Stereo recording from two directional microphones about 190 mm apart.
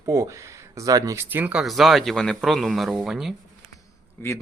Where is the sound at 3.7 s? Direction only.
15° left (ahead or behind).